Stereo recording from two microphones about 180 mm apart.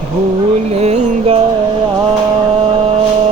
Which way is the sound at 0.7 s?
40° right (ahead or behind).